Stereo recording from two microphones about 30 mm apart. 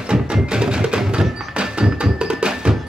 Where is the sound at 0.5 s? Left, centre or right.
Right.